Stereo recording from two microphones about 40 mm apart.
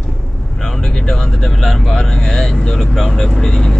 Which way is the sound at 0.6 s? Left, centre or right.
Centre.